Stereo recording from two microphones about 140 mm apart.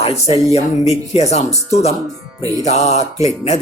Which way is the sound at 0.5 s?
50° left (ahead or behind).